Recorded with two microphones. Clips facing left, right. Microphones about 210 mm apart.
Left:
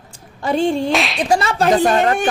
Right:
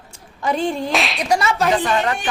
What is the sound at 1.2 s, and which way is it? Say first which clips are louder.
A woman's voice: left 2 dB; 30° left (ahead or behind).